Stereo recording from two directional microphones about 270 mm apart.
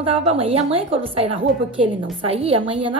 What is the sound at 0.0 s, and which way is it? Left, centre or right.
A woman's voice, right.